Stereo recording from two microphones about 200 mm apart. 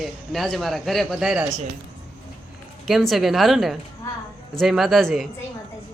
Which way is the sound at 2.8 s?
Centre (ahead or behind).